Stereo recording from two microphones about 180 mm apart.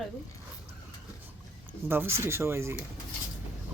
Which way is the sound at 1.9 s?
10° right (ahead or behind).